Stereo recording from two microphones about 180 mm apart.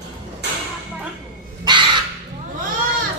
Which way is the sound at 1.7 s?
25° right (ahead or behind).